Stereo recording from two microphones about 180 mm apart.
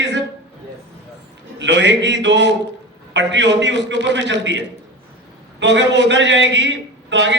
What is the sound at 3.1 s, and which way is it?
A man's voice, 80° right.